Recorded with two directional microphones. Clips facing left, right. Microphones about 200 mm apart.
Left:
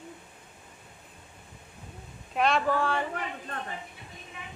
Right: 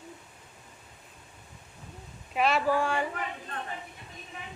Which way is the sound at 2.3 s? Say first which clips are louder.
Even; 5° right (ahead or behind).